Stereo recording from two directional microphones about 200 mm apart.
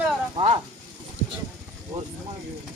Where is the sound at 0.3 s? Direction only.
30° right (ahead or behind).